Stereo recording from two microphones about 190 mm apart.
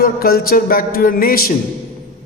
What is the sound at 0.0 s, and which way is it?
Speech, 50° left (ahead or behind).